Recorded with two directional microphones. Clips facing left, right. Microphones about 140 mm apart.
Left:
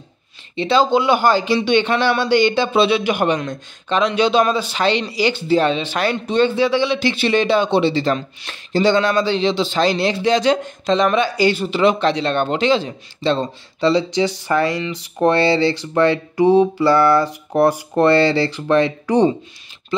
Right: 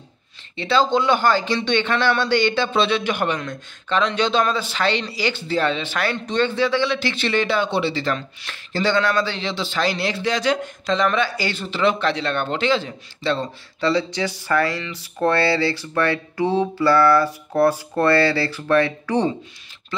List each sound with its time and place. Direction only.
0.6 s a man's voice: 15° left (ahead or behind)